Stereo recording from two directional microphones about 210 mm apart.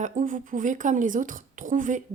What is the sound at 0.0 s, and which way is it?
A woman's voice, 35° right (ahead or behind).